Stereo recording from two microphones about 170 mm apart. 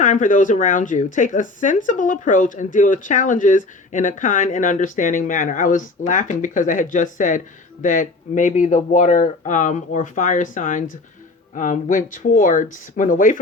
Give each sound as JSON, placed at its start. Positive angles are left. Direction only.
{"t": 0.0, "sound": "speech", "side_deg": 50}